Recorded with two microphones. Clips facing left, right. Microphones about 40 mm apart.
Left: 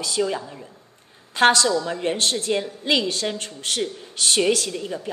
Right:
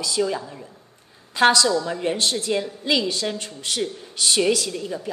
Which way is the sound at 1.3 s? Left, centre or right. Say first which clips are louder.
Even; left.